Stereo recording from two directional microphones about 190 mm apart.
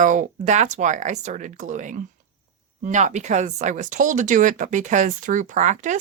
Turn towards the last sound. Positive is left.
turn(degrees=-40)  # may be behind; listen again after turning